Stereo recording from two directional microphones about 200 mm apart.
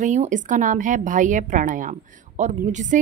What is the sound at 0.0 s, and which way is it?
A woman's voice, 40° right (ahead or behind).